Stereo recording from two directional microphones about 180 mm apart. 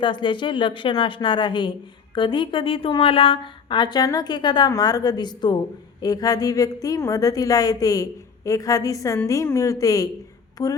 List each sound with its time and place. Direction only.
0.0 s a woman's voice: 25° left (ahead or behind)